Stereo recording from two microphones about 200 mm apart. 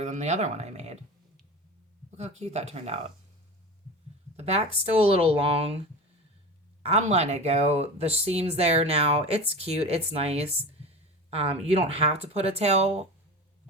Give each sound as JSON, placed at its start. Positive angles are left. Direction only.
{"t": 0.0, "sound": "speech", "side_deg": -35}
{"t": 2.0, "sound": "speech", "side_deg": -35}
{"t": 4.4, "sound": "speech", "side_deg": -30}
{"t": 6.8, "sound": "speech", "side_deg": -35}